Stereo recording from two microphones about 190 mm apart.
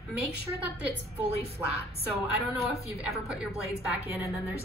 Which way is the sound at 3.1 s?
5° right (ahead or behind).